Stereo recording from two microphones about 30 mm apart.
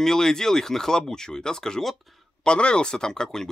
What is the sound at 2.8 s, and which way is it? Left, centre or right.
Speech, left.